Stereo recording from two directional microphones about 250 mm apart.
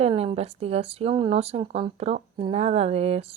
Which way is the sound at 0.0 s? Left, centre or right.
Right.